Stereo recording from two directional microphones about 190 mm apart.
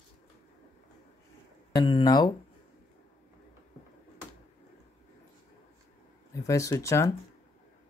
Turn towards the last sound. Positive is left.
turn(degrees=15)  # may be behind; listen again after turning